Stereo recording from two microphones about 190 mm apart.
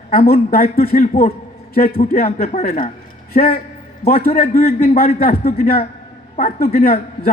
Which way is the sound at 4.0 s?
35° left (ahead or behind).